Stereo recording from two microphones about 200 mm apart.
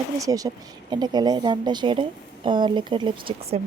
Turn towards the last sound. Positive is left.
turn(degrees=-30)  # may be behind; listen again after turning